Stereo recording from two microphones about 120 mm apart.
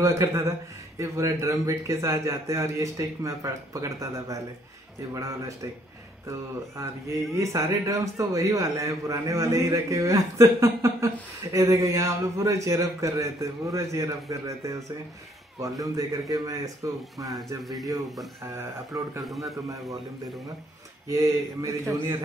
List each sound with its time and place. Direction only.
0.0 s speech: 25° right (ahead or behind)
7.3 s speech: 25° right (ahead or behind)
21.1 s speech: 25° right (ahead or behind)